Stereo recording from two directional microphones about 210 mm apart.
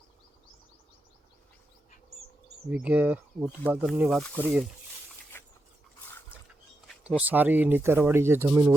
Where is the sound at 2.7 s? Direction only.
5° right (ahead or behind).